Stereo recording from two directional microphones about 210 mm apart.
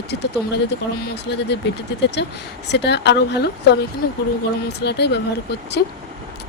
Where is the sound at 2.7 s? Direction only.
55° left (ahead or behind).